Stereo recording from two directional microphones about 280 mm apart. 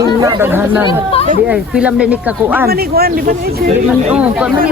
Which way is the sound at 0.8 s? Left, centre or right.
Centre.